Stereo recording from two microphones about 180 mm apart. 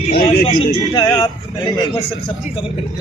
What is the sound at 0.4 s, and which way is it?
A man's voice, 30° left (ahead or behind).